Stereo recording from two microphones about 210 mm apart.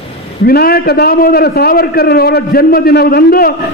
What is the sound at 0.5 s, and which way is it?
A man's voice, 45° left (ahead or behind).